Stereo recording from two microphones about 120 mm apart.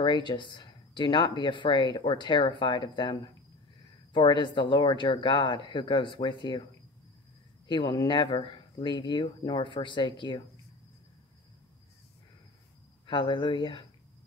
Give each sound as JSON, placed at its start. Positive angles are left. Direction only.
{"t": 0.0, "sound": "speech", "side_deg": 40}
{"t": 7.6, "sound": "speech", "side_deg": 40}
{"t": 13.0, "sound": "speech", "side_deg": 45}